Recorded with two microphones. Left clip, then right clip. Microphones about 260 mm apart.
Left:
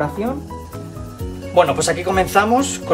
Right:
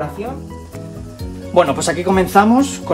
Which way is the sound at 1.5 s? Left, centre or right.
Centre.